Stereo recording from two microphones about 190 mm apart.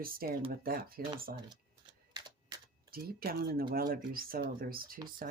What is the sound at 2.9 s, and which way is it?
Speech, 50° right (ahead or behind).